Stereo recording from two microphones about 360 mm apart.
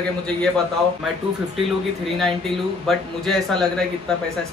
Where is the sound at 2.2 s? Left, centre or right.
Centre.